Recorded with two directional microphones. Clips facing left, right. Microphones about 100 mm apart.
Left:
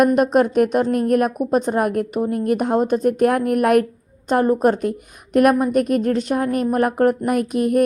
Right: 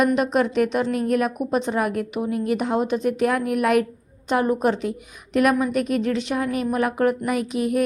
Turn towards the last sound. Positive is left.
turn(degrees=50)  # may be behind; listen again after turning